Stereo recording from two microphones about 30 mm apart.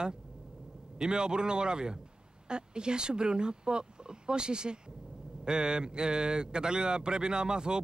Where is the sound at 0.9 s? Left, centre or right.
Right.